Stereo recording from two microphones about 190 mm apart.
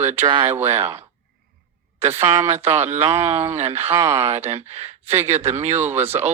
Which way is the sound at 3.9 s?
15° right (ahead or behind).